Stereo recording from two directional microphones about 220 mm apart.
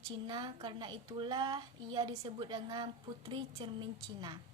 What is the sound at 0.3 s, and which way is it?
A woman's voice, 20° right (ahead or behind).